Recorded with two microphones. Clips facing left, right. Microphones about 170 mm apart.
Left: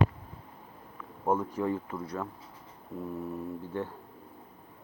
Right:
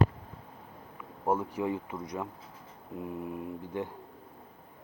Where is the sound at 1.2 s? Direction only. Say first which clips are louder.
Left 1 dB; 10° right (ahead or behind).